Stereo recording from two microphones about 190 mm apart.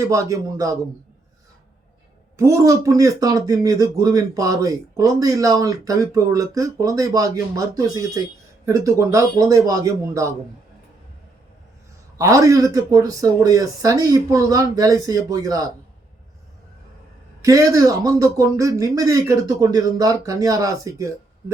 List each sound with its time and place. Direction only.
0.0 s speech: 15° right (ahead or behind)
2.3 s speech: 15° right (ahead or behind)
12.1 s speech: 15° right (ahead or behind)
17.4 s speech: 15° right (ahead or behind)